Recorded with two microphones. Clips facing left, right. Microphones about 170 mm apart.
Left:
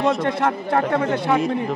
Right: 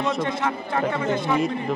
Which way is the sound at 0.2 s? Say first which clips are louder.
Left 4 dB; 60° left (ahead or behind).